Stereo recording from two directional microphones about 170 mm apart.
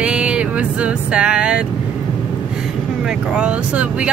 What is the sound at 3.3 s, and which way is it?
Vehicle, 5° right (ahead or behind).